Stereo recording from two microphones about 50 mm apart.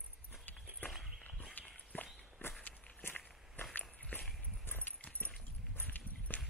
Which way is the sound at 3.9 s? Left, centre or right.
Left.